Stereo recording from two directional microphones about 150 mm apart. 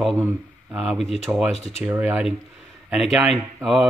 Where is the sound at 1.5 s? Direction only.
45° left (ahead or behind).